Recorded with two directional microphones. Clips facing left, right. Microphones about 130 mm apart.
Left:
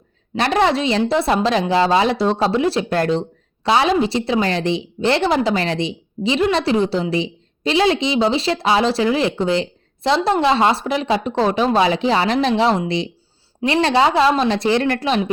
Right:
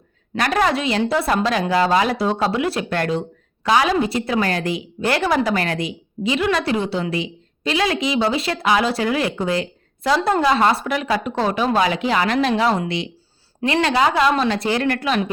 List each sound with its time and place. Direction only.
0.3 s a woman's voice: 30° left (ahead or behind)
2.1 s speech: 5° right (ahead or behind)
2.6 s a woman's voice: 30° left (ahead or behind)